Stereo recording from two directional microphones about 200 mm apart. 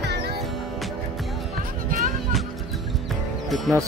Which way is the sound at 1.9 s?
40° right (ahead or behind).